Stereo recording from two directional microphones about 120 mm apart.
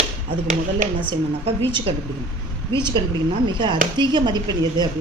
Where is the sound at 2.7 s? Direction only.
40° right (ahead or behind).